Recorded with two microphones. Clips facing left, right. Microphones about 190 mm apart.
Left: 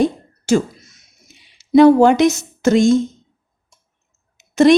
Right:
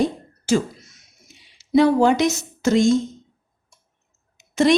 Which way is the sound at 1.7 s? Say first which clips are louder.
Left 6 dB; 55° left (ahead or behind).